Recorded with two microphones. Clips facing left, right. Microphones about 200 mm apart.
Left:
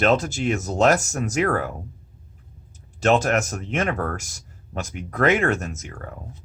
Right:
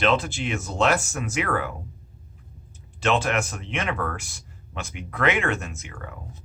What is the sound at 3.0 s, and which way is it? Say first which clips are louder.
Speech: left 4 dB; 40° left (ahead or behind).